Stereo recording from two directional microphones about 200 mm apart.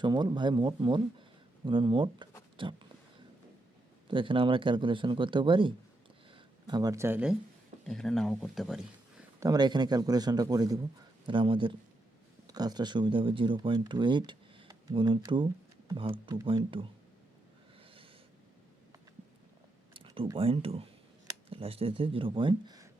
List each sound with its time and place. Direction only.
0.0 s speech: 20° right (ahead or behind)
4.1 s speech: 25° right (ahead or behind); by 8.8 s centre (ahead or behind)
9.4 s speech: 20° right (ahead or behind)
19.9 s speech: 25° right (ahead or behind)